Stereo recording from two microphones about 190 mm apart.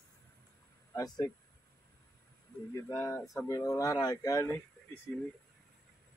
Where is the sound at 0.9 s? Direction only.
20° left (ahead or behind).